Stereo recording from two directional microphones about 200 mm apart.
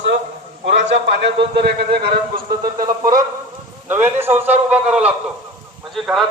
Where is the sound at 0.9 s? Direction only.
60° right (ahead or behind).